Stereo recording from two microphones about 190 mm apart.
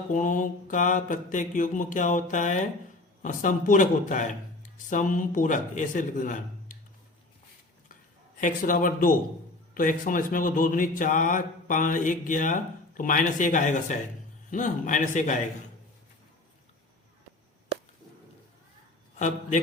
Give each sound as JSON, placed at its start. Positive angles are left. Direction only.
{"t": 0.1, "sound": "speech", "side_deg": 45}
{"t": 8.4, "sound": "a man's voice", "side_deg": 45}